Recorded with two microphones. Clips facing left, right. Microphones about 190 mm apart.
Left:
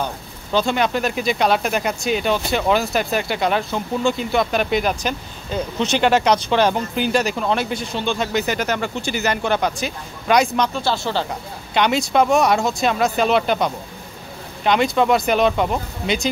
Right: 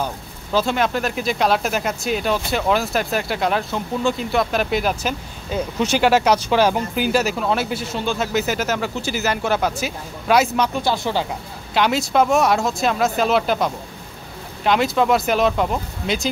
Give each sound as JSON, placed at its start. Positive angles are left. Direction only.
{"t": 0.0, "sound": "speech", "side_deg": -5}
{"t": 11.7, "sound": "speech", "side_deg": 0}